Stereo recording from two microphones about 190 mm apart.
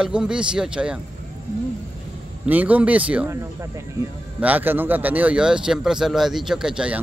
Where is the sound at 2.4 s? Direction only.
10° right (ahead or behind).